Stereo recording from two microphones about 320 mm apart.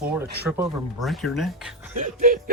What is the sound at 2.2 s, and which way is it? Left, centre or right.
Music, right.